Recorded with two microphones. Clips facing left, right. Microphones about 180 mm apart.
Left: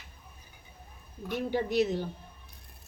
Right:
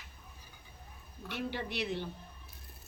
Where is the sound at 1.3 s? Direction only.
45° left (ahead or behind).